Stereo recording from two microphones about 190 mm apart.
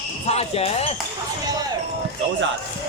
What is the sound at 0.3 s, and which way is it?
Speech, 30° left (ahead or behind).